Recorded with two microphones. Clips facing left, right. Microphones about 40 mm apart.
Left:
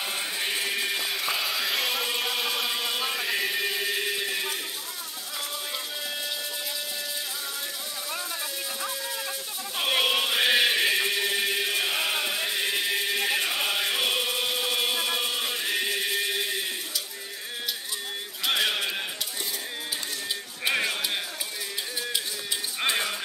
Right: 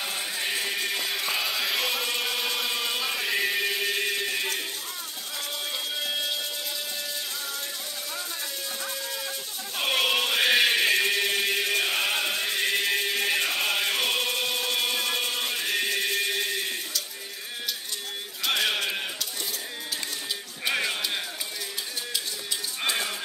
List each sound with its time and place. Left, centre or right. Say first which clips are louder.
0.0 s chant: even; centre
3.1 s a sound: right 1 dB; centre
10.0 s music: right 2 dB; centre
11.4 s chant: right 1 dB; centre
18.4 s a sound: even; centre
20.6 s music: left 1 dB; centre
22.8 s music: left 2 dB; centre